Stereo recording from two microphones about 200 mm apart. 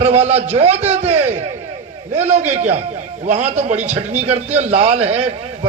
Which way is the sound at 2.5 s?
35° right (ahead or behind).